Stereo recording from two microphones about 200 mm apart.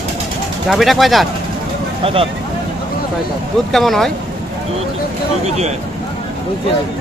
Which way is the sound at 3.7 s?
Centre (ahead or behind).